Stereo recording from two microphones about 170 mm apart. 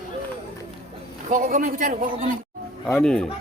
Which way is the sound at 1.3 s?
50° right (ahead or behind).